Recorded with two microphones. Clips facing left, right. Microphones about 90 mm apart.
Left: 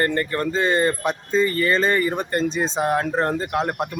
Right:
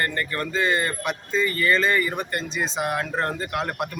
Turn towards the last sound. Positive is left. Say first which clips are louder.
# left 4 dB
turn(degrees=25)  # may be behind; listen again after turning